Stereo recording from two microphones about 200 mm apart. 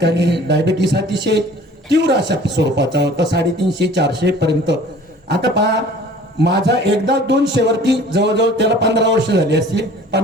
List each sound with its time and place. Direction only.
0.0 s speech: 60° right (ahead or behind)